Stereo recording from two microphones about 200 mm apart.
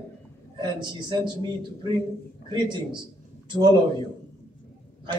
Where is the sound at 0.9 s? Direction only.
20° right (ahead or behind).